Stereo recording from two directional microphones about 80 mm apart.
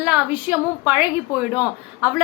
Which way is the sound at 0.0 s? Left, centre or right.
Centre.